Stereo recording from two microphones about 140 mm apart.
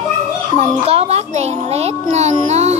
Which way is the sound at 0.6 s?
50° right (ahead or behind).